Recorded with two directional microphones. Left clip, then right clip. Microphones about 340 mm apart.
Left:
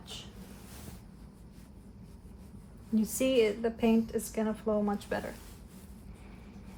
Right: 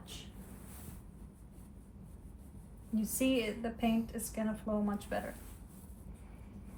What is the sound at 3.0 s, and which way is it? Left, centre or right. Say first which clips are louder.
A woman's voice: left 7 dB; left.